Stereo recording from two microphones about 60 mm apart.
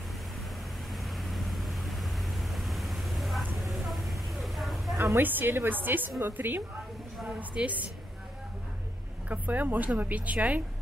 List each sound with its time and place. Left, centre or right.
0.9 s vehicle: centre
5.2 s a woman's voice: right
7.2 s speech: right
9.3 s speech: right